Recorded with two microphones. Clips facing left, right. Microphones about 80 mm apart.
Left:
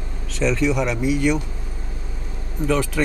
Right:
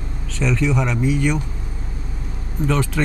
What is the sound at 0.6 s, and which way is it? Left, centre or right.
Speech, centre.